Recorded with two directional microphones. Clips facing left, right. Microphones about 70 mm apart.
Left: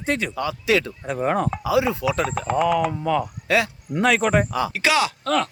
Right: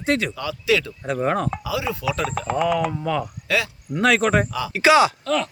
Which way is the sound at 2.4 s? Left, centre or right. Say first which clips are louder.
Even; centre.